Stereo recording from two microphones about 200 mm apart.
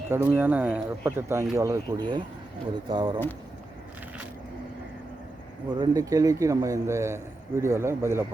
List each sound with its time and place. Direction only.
0.1 s a man's voice: 10° right (ahead or behind)
5.8 s a man's voice: 15° right (ahead or behind)